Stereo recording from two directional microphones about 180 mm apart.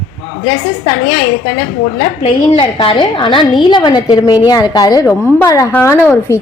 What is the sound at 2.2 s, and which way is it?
A woman's voice, 30° left (ahead or behind).